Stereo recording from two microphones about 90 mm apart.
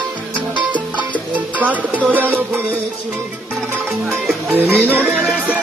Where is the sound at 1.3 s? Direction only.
15° right (ahead or behind).